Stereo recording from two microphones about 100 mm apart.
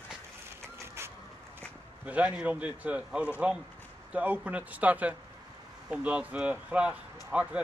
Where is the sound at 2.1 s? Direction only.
10° right (ahead or behind).